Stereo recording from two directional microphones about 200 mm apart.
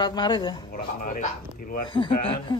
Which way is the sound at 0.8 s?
40° left (ahead or behind).